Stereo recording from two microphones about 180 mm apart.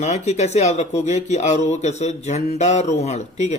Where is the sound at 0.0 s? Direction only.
40° left (ahead or behind).